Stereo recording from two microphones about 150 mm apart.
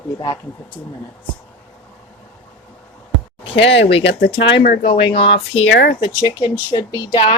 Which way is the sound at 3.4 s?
35° left (ahead or behind).